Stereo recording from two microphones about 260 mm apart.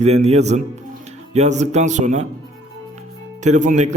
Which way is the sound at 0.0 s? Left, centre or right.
Right.